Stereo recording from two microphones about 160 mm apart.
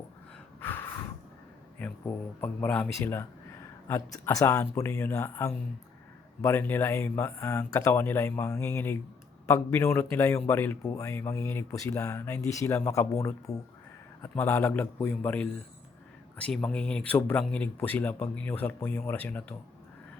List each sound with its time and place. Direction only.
0.6 s snort: 15° left (ahead or behind)
1.8 s a sound: 10° left (ahead or behind)
2.4 s speech: 10° left (ahead or behind)
16.6 s speech: 5° left (ahead or behind)